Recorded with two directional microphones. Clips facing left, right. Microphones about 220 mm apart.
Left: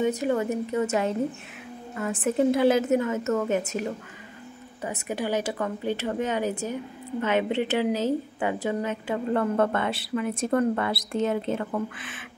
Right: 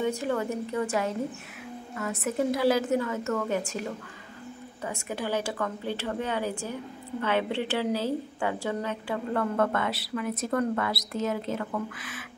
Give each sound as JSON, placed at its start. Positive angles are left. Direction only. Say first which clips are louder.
{"t": 0.2, "sound": "a woman's voice", "louder": "left 4 dB", "side_deg": 20}
{"t": 4.8, "sound": "a woman's voice", "louder": "left 3 dB", "side_deg": 15}